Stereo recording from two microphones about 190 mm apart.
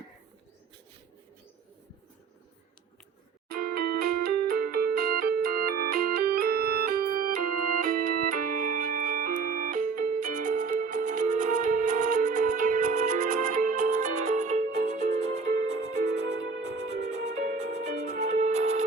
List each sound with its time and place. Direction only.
3.5 s music: 55° right (ahead or behind); by 18.0 s 35° right (ahead or behind)
18.0 s music: 60° right (ahead or behind)
18.3 s music: 40° right (ahead or behind)